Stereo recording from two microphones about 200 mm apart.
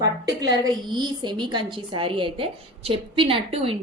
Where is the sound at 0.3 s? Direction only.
20° right (ahead or behind).